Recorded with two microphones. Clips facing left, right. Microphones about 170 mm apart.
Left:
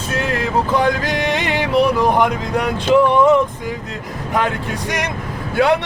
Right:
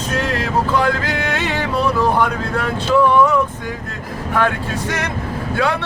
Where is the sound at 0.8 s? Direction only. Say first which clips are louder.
Left 1 dB; 15° left (ahead or behind).